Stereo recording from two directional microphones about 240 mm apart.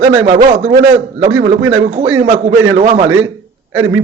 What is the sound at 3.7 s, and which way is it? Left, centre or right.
Speech, centre.